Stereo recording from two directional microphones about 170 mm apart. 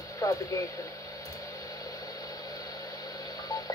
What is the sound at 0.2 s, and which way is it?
Speech, 20° left (ahead or behind).